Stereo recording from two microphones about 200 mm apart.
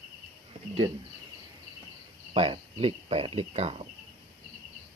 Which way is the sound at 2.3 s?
30° right (ahead or behind).